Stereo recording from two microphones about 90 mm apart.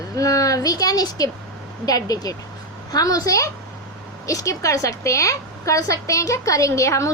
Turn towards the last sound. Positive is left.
turn(degrees=35)  # may be behind; listen again after turning